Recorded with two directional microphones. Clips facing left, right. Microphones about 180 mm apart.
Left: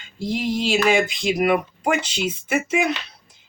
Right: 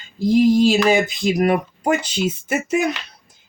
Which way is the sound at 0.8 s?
40° right (ahead or behind).